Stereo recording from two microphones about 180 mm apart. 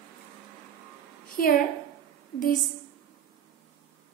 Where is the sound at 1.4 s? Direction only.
50° left (ahead or behind).